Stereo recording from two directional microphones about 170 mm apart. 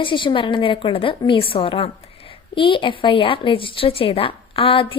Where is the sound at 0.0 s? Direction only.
30° left (ahead or behind).